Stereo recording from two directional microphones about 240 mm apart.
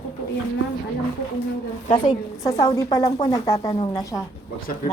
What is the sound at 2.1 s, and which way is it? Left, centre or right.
A woman's voice, centre.